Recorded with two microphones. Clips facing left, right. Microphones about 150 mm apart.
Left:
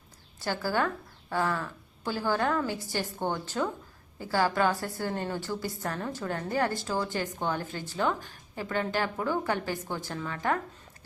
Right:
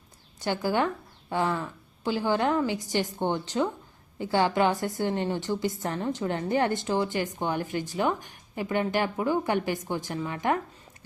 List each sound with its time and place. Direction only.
0.3 s a woman's voice: 20° right (ahead or behind)